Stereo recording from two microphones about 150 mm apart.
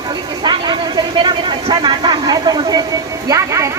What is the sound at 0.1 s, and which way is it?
Speech, 30° right (ahead or behind).